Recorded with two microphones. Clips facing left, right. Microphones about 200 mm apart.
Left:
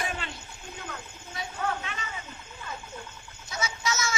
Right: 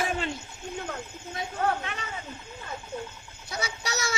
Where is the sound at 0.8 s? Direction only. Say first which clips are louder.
Right 5 dB; 45° right (ahead or behind).